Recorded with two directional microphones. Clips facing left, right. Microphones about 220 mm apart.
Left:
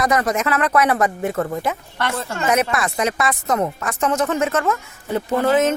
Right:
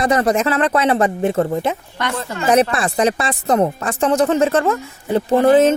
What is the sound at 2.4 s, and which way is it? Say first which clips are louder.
Speech: right 5 dB; 35° right (ahead or behind).